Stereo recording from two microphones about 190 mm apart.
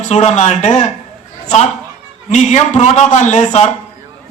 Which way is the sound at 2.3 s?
40° left (ahead or behind).